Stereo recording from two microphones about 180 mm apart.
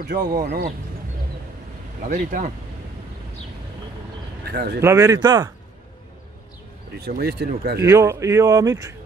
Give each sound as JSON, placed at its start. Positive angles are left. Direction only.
{"t": 0.3, "sound": "speech", "side_deg": -55}
{"t": 2.0, "sound": "speech", "side_deg": -45}
{"t": 4.5, "sound": "speech", "side_deg": -60}
{"t": 4.8, "sound": "speech", "side_deg": -20}
{"t": 7.0, "sound": "speech", "side_deg": -60}
{"t": 7.8, "sound": "speech", "side_deg": -15}